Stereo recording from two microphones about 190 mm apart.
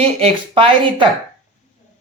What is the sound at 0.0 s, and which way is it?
Speech, 30° right (ahead or behind).